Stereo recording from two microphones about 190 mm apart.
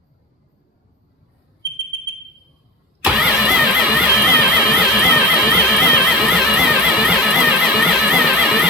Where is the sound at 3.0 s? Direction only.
5° right (ahead or behind).